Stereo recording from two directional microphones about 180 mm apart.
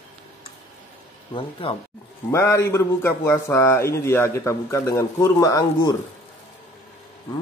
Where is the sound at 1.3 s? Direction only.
30° left (ahead or behind).